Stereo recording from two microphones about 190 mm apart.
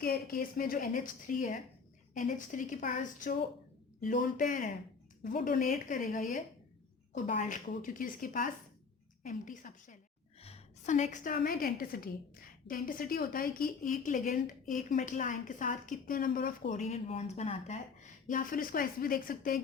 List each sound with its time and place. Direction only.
0.0 s a woman's voice: 55° left (ahead or behind)